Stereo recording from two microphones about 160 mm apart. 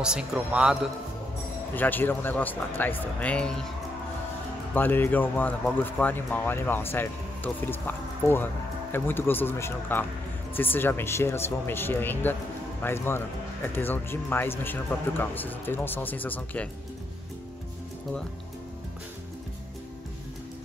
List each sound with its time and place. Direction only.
0.0 s a man's voice: 5° right (ahead or behind)
1.8 s speech: 10° left (ahead or behind)
4.7 s speech: 15° left (ahead or behind)